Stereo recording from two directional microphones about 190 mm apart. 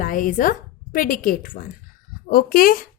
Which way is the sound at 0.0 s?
45° left (ahead or behind).